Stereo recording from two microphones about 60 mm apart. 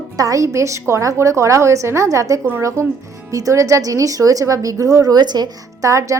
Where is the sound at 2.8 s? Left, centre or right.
Right.